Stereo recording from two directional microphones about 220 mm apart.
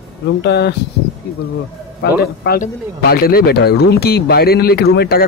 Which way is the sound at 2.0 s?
40° left (ahead or behind).